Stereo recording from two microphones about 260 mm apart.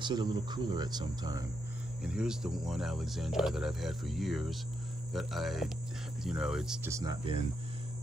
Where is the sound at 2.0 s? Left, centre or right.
Centre.